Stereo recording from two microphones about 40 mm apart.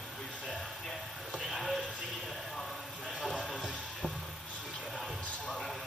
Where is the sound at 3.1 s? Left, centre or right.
Centre.